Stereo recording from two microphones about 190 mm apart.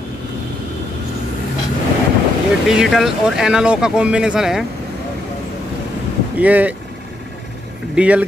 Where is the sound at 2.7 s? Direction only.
Centre (ahead or behind).